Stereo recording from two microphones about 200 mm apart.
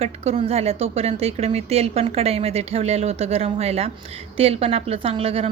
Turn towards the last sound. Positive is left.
turn(degrees=-30)  # may be behind; listen again after turning